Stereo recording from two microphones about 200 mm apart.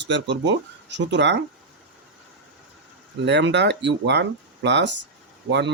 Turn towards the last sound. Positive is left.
turn(degrees=-60)  # may be behind; listen again after turning